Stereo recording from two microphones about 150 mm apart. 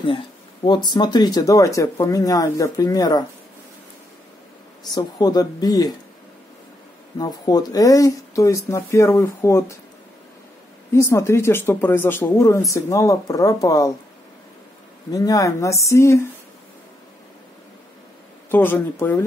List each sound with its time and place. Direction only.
0.7 s speech: 30° left (ahead or behind)
4.9 s speech: 25° left (ahead or behind)
7.2 s speech: 25° left (ahead or behind)
10.9 s speech: 20° left (ahead or behind)
15.0 s speech: 25° left (ahead or behind)
18.5 s speech: 15° left (ahead or behind)